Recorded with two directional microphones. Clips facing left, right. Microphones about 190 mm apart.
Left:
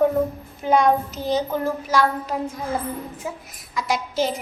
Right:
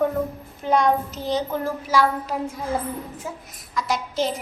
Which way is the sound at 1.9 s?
5° right (ahead or behind).